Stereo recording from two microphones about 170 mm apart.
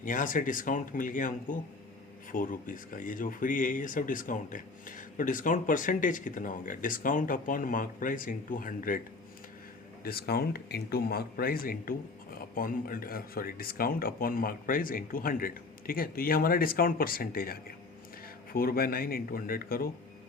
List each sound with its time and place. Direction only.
0.0 s speech: 50° left (ahead or behind)
10.0 s speech: 65° left (ahead or behind)